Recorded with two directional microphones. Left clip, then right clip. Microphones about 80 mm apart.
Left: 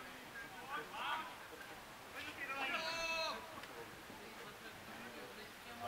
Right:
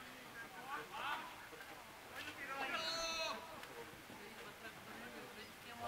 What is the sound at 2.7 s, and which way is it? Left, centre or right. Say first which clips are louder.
Sheep: even; centre.